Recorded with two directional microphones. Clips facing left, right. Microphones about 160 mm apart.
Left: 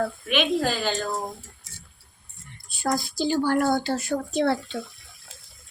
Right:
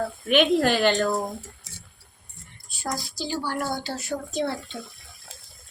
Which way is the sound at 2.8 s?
55° left (ahead or behind).